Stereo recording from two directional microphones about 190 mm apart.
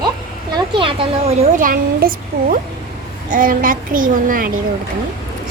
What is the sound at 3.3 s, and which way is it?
A child's voice, 45° right (ahead or behind).